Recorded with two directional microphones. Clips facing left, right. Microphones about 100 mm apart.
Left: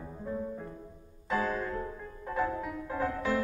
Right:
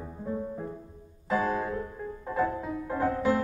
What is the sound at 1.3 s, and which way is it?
Music, 15° right (ahead or behind).